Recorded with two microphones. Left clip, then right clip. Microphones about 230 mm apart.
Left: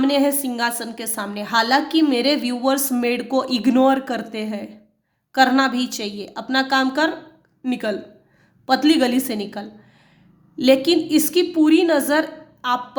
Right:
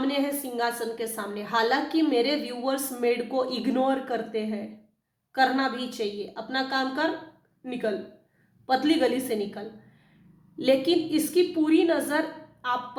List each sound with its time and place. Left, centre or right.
0.0 s a woman's voice: left